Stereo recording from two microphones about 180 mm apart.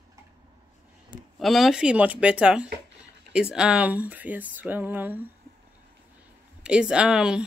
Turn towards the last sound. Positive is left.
turn(degrees=-5)  # may be behind; listen again after turning